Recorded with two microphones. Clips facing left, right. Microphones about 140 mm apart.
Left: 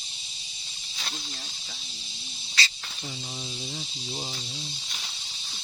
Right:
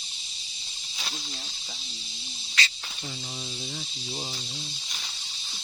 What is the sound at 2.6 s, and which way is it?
Insect, 35° left (ahead or behind).